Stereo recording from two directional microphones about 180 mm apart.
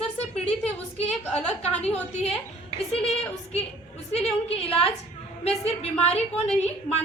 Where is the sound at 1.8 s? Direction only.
35° left (ahead or behind).